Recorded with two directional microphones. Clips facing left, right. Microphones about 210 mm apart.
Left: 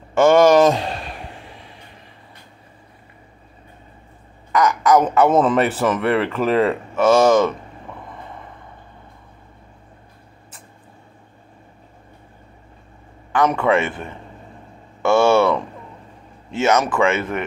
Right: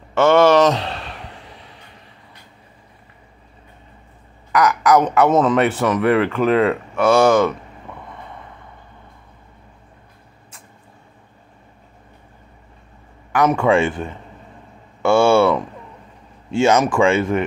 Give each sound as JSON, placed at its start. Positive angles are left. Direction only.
{"t": 0.2, "sound": "a man's voice", "side_deg": 10}
{"t": 4.6, "sound": "speech", "side_deg": 0}
{"t": 13.4, "sound": "a man's voice", "side_deg": -5}
{"t": 13.7, "sound": "speech", "side_deg": -25}
{"t": 15.0, "sound": "speech", "side_deg": -10}
{"t": 16.7, "sound": "a man's voice", "side_deg": -15}
{"t": 17.0, "sound": "speech", "side_deg": -30}